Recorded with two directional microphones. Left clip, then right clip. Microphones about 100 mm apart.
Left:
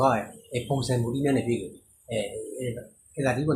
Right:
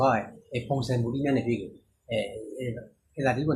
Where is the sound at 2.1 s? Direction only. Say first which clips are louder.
Even; 30° left (ahead or behind).